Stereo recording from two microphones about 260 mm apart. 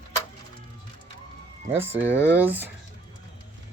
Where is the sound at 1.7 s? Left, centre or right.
Centre.